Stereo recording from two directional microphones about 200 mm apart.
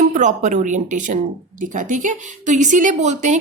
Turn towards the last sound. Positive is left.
turn(degrees=-35)  # may be behind; listen again after turning